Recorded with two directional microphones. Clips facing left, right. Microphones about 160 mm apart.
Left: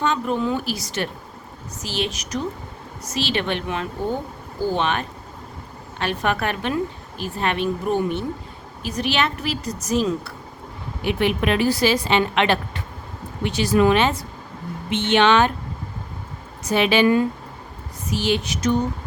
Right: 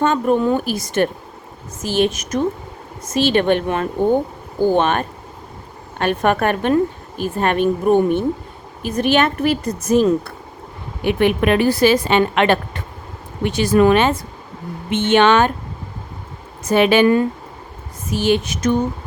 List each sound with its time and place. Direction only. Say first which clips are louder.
0.0 s a woman's voice: right 6 dB; 50° right (ahead or behind)
16.6 s a woman's voice: right 4 dB; 50° right (ahead or behind)